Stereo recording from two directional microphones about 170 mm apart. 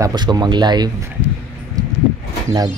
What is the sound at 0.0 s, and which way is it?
Speech, 25° right (ahead or behind).